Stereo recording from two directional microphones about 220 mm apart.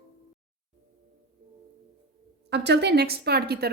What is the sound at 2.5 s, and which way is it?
Speech, 50° right (ahead or behind).